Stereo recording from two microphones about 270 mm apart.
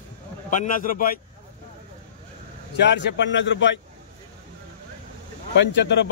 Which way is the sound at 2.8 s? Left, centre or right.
Left.